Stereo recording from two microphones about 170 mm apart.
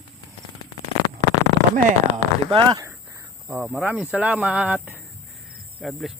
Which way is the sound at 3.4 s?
10° right (ahead or behind).